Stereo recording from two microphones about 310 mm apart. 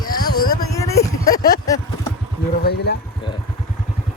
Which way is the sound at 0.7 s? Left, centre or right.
Centre.